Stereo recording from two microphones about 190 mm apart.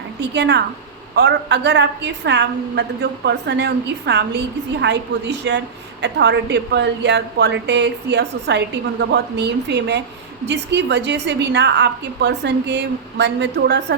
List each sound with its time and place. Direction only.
0.2 s a woman's voice: 65° right (ahead or behind)